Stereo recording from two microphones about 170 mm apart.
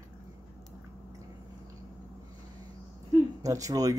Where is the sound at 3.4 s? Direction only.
20° right (ahead or behind).